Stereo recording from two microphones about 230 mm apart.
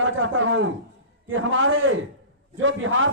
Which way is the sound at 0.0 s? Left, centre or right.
Right.